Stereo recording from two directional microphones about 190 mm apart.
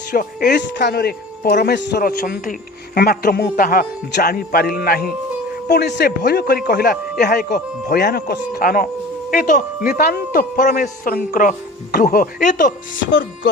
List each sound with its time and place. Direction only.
0.1 s speech: 50° left (ahead or behind)
5.6 s speech: 60° left (ahead or behind); by 12.7 s 40° left (ahead or behind)
13.0 s music: 70° left (ahead or behind)